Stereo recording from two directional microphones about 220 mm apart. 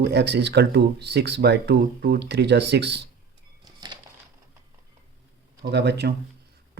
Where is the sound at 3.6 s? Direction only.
20° right (ahead or behind).